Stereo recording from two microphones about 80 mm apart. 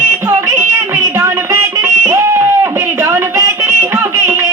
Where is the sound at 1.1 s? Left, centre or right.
Right.